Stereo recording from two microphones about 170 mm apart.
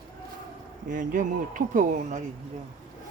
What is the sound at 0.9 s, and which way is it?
Speech, 50° right (ahead or behind).